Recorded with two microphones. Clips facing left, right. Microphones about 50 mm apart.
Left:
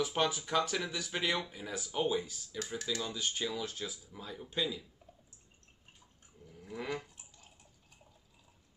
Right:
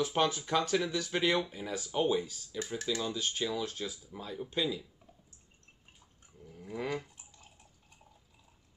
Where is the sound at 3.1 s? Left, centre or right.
Centre.